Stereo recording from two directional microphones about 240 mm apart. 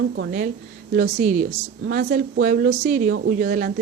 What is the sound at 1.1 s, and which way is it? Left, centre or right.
Speech, right.